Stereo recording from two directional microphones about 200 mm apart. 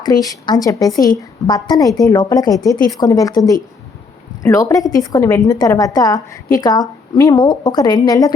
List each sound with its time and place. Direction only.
0.0 s a woman's voice: 20° left (ahead or behind)